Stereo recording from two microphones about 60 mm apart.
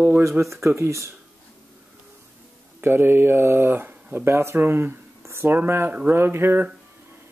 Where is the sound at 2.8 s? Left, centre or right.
Right.